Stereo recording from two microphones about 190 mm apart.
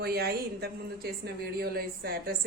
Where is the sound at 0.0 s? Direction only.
55° right (ahead or behind).